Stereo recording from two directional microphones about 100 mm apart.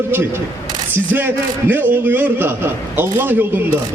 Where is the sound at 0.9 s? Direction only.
20° right (ahead or behind).